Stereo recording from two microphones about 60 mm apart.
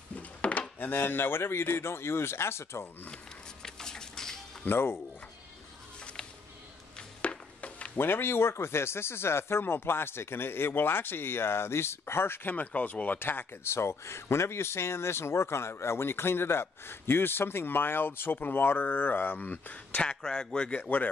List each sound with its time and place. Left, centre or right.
0.1 s wood: left
0.7 s speech: left
3.6 s a sound: centre
4.6 s speech: left
7.0 s chop: left
8.0 s speech: left
12.5 s speech: left